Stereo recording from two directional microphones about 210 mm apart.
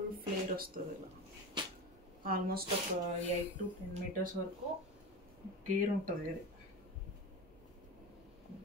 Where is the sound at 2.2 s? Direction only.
45° right (ahead or behind).